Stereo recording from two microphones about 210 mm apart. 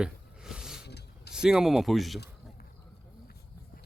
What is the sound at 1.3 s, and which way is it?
Speech, 5° right (ahead or behind).